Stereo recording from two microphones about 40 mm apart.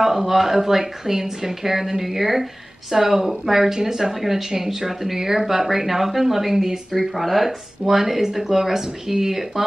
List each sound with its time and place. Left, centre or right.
0.0 s speech: centre